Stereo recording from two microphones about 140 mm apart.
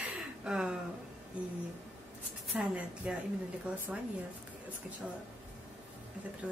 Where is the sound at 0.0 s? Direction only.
5° right (ahead or behind).